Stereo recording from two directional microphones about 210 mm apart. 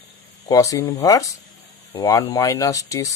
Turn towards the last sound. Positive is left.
turn(degrees=15)  # may be behind; listen again after turning